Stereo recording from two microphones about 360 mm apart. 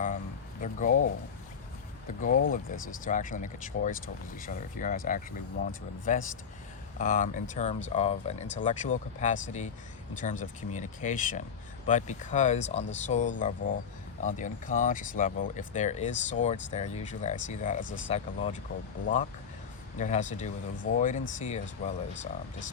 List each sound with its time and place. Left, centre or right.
0.6 s speech: left